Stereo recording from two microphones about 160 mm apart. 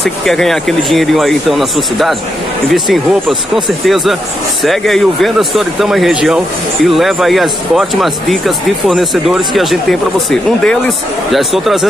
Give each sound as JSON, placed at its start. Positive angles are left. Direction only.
{"t": 0.0, "sound": "speech", "side_deg": 0}